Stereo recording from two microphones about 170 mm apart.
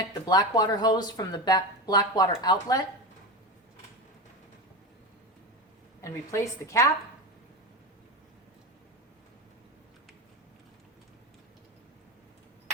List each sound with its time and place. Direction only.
0.1 s speech: 25° left (ahead or behind)
6.0 s a woman's voice: 15° left (ahead or behind)